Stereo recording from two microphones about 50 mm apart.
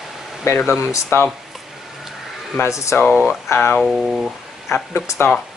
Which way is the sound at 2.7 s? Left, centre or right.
Left.